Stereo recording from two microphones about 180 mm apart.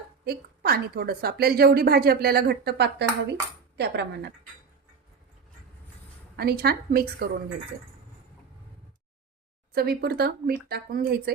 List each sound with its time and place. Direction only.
0.3 s a woman's voice: 60° right (ahead or behind)
6.3 s a woman's voice: 60° right (ahead or behind)
9.7 s a woman's voice: 60° right (ahead or behind)